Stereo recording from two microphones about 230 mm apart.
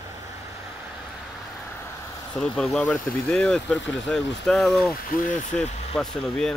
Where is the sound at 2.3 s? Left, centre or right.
Centre.